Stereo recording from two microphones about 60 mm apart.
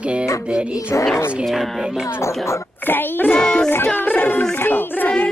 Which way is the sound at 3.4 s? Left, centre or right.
Centre.